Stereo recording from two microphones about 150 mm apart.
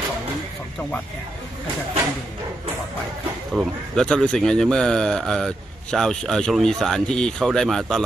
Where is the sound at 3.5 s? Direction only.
Centre (ahead or behind).